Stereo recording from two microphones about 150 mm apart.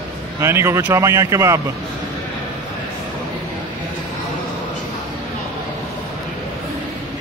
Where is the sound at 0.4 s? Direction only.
15° right (ahead or behind).